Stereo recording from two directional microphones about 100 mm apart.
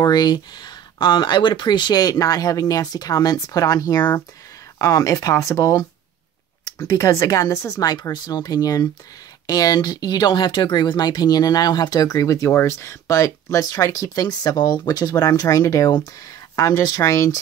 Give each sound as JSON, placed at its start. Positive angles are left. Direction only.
{"t": 0.0, "sound": "speech", "side_deg": 45}